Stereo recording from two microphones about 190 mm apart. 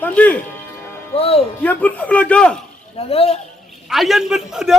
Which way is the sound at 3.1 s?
30° left (ahead or behind).